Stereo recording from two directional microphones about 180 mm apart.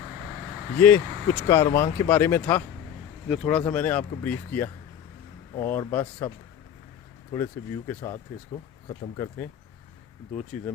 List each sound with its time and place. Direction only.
0.8 s speech: 10° left (ahead or behind)
7.3 s speech: 15° left (ahead or behind)
9.1 s speech: 15° left (ahead or behind)